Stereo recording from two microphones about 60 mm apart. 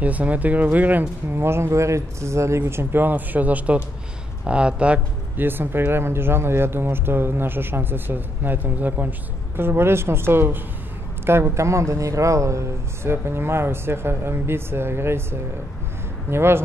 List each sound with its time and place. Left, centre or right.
0.0 s speech: right
1.4 s speech: right; by 5.0 s centre
5.4 s speech: right
9.6 s speech: right
16.3 s speech: right